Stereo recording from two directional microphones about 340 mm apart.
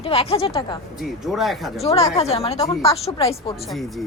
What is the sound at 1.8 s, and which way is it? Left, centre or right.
A woman's voice, centre.